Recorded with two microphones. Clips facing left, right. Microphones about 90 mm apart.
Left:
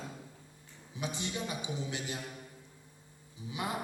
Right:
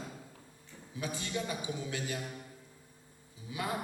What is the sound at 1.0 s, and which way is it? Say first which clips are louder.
A man's voice: right 1 dB; 20° left (ahead or behind).